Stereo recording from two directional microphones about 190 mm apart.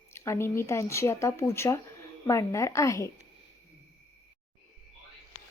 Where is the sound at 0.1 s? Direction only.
15° left (ahead or behind).